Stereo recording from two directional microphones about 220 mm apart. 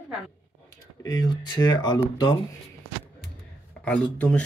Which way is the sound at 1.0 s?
15° left (ahead or behind).